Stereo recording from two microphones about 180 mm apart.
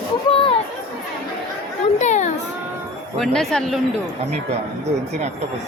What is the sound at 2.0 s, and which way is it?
Children playing, 40° left (ahead or behind).